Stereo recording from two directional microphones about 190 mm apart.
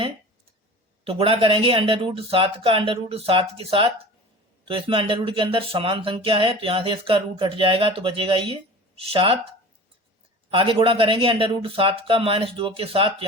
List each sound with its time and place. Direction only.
1.0 s speech: 30° right (ahead or behind)
10.5 s speech: 25° right (ahead or behind)